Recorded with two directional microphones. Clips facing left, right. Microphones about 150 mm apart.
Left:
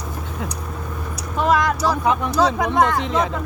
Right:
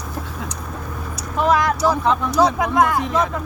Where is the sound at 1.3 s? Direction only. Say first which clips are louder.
Right 1 dB; centre (ahead or behind).